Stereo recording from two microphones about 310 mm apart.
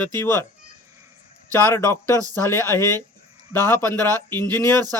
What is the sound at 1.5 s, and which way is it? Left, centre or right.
Speech, centre.